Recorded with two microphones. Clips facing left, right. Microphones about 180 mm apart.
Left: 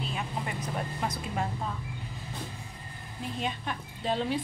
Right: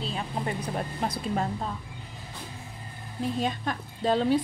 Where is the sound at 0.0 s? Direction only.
35° right (ahead or behind).